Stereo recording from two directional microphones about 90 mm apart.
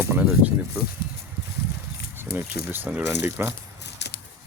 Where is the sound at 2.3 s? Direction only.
25° right (ahead or behind).